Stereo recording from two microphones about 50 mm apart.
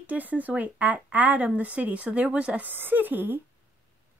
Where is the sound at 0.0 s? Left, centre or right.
Right.